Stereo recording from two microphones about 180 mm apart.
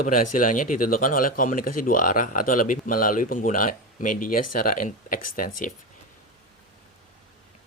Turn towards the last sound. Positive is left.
turn(degrees=50)  # may be behind; listen again after turning